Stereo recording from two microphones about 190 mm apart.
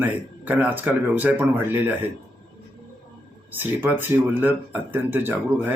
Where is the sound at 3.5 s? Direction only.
10° right (ahead or behind).